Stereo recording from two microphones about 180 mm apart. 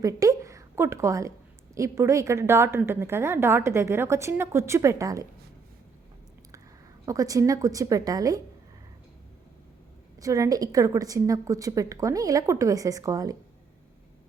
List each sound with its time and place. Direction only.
0.0 s a woman's voice: 20° right (ahead or behind)
7.0 s a woman's voice: 20° right (ahead or behind)
10.2 s a woman's voice: 20° right (ahead or behind)